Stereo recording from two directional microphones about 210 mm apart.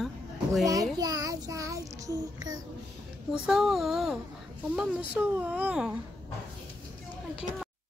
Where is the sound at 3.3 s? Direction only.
Centre (ahead or behind).